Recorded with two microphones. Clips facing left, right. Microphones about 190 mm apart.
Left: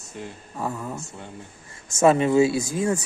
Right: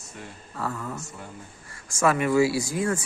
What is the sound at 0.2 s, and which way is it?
Speech, 15° left (ahead or behind).